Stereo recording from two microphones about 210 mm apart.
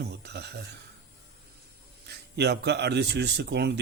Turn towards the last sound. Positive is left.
turn(degrees=-50)  # may be behind; listen again after turning